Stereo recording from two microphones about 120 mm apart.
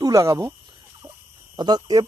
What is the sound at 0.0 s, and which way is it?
Speech, 25° right (ahead or behind).